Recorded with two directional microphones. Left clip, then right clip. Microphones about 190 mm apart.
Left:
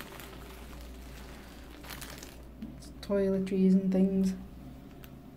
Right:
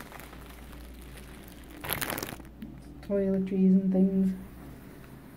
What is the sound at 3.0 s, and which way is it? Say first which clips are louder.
Speech: even; centre (ahead or behind).